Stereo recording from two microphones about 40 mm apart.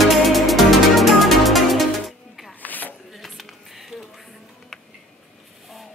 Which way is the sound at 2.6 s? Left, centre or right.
Left.